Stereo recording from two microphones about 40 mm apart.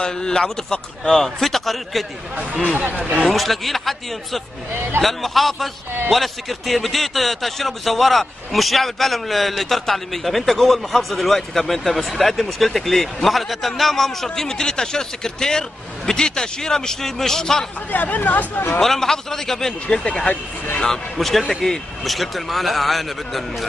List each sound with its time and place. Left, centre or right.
0.0 s a man's voice: centre
1.1 s a man's voice: centre
2.7 s speech: right
3.3 s a man's voice: centre
14.3 s a man's voice: centre
17.9 s speech: left
18.8 s a man's voice: centre
20.1 s a man's voice: left
21.2 s a man's voice: centre